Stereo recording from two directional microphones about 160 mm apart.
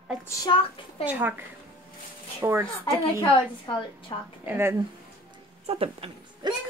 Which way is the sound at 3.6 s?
30° left (ahead or behind).